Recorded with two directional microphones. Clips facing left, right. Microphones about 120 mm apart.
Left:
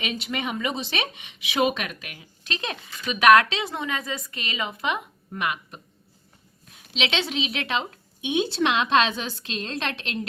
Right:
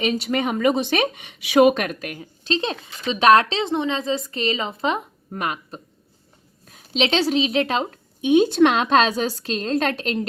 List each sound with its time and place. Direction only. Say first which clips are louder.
0.0 s speech: right 8 dB; 40° right (ahead or behind)